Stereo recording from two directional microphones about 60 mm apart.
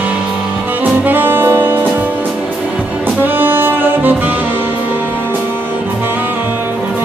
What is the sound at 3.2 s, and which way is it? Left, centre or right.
Saxophone, right.